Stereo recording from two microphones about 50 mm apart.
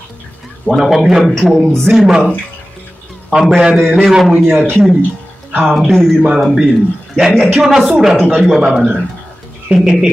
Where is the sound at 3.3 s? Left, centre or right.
Centre.